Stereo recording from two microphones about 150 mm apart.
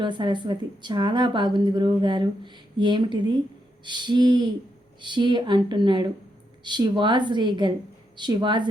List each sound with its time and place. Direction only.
0.0 s a woman's voice: 30° right (ahead or behind)